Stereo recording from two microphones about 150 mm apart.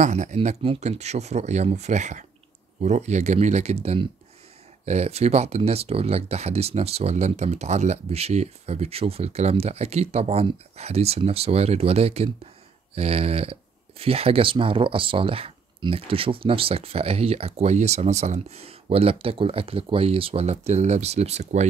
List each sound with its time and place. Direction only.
0.0 s speech: 50° right (ahead or behind)